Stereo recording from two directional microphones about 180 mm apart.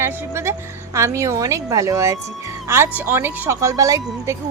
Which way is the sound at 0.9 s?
15° right (ahead or behind).